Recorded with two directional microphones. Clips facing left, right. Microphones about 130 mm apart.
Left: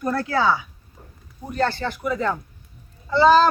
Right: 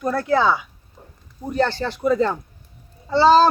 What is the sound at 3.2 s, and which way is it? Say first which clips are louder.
Speech: right 1 dB; 35° right (ahead or behind).